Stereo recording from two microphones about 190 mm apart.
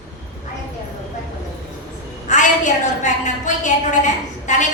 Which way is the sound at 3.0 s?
40° left (ahead or behind).